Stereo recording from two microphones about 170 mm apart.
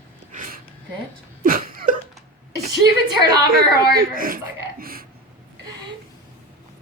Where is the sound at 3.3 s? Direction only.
60° right (ahead or behind).